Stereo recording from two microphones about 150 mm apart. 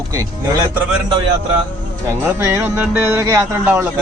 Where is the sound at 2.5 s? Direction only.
15° right (ahead or behind).